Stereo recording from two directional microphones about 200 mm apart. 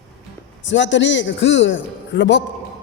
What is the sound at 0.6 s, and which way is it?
Speech, 65° left (ahead or behind).